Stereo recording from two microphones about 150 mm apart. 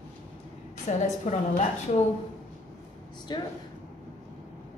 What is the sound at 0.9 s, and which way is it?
Speech, 55° left (ahead or behind).